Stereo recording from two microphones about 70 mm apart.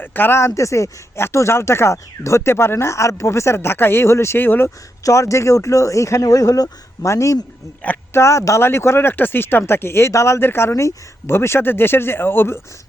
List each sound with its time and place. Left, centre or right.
0.0 s speech: left
5.0 s speech: left